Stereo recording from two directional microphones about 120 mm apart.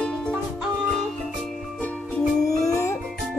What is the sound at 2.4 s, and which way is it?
Music, 25° left (ahead or behind).